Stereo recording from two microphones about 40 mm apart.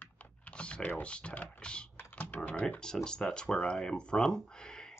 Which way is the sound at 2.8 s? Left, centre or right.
Centre.